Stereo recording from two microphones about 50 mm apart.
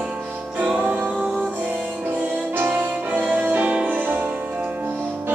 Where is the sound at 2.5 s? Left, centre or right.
Right.